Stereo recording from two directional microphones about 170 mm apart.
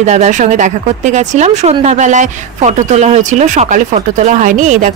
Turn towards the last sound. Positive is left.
turn(degrees=-50)  # may be behind; listen again after turning